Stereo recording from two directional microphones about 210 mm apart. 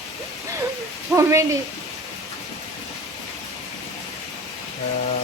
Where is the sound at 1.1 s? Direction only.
15° right (ahead or behind).